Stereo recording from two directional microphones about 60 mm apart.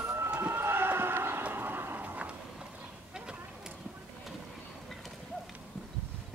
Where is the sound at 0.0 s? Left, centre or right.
Right.